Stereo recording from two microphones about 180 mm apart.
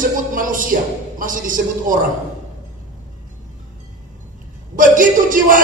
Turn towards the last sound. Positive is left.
turn(degrees=-50)  # may be behind; listen again after turning